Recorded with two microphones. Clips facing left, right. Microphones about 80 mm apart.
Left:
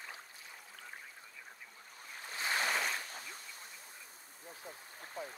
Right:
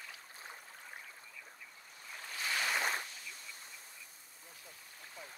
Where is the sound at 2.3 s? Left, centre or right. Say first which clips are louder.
Left 2 dB; left.